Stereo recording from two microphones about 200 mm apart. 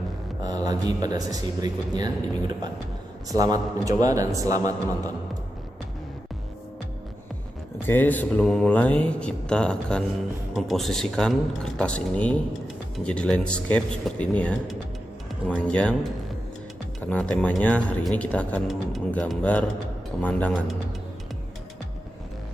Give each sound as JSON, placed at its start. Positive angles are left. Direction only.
{"t": 0.4, "sound": "a man's voice", "side_deg": -20}
{"t": 3.2, "sound": "a man's voice", "side_deg": -20}
{"t": 7.9, "sound": "speech", "side_deg": 10}
{"t": 17.0, "sound": "speech", "side_deg": 5}